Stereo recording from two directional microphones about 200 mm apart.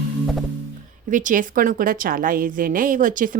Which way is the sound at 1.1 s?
40° right (ahead or behind).